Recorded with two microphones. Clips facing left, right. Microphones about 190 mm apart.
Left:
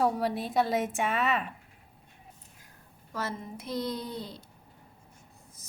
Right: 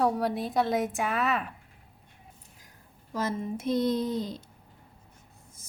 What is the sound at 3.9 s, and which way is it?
Speech, 20° right (ahead or behind).